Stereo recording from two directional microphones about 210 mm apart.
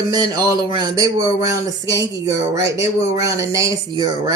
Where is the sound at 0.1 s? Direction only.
20° right (ahead or behind).